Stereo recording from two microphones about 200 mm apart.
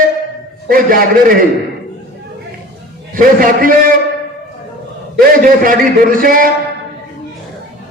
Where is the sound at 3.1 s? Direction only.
45° right (ahead or behind).